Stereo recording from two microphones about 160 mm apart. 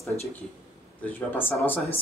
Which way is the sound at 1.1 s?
10° left (ahead or behind).